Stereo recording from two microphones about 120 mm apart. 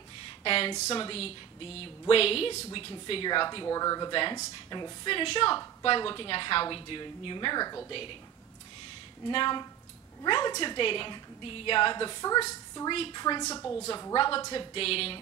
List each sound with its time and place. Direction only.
0.4 s a woman's voice: 45° left (ahead or behind)
3.3 s a woman's voice: 40° left (ahead or behind)
3.6 s a woman's voice: 25° left (ahead or behind)
4.1 s a woman's voice: 40° left (ahead or behind)
4.4 s a woman's voice: 30° left (ahead or behind)
9.3 s a woman's voice: 40° left (ahead or behind); by 12.9 s 25° left (ahead or behind)
12.9 s a woman's voice: 50° left (ahead or behind)
13.2 s a woman's voice: 30° left (ahead or behind)
14.1 s a woman's voice: 45° left (ahead or behind)